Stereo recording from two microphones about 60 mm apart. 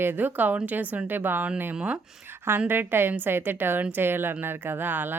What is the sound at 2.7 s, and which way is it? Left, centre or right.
Speech, right.